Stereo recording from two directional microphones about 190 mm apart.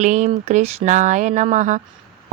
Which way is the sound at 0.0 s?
40° right (ahead or behind).